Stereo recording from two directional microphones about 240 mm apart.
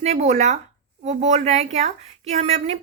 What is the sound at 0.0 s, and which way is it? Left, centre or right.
A woman's voice, right.